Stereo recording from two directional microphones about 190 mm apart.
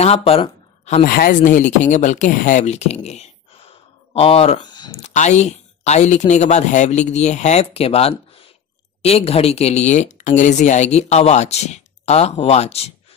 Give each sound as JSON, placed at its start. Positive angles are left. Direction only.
{"t": 0.0, "sound": "a sound", "side_deg": 30}
{"t": 1.0, "sound": "speech", "side_deg": 50}
{"t": 5.0, "sound": "speech", "side_deg": 35}